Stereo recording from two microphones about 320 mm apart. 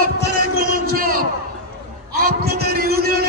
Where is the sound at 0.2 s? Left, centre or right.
Right.